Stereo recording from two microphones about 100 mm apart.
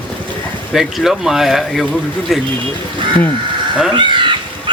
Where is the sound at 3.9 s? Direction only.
50° right (ahead or behind).